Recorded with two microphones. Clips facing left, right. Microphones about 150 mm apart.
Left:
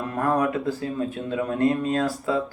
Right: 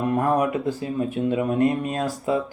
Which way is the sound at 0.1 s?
20° right (ahead or behind).